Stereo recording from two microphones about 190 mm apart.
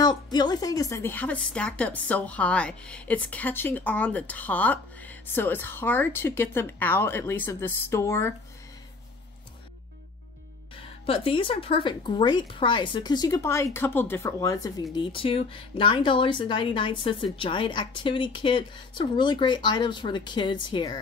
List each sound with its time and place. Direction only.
0.0 s a woman's voice: 20° left (ahead or behind)
10.8 s speech: 30° left (ahead or behind)